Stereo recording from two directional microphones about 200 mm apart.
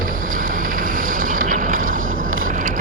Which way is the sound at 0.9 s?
45° right (ahead or behind).